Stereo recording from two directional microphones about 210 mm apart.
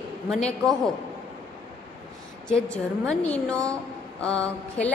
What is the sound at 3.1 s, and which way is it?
Speech, 5° left (ahead or behind).